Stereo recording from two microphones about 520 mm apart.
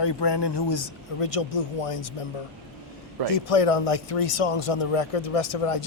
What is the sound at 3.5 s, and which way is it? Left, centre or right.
A man's voice, left.